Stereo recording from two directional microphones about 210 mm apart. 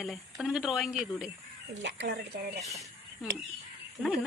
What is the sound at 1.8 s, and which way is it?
Speech, 55° right (ahead or behind).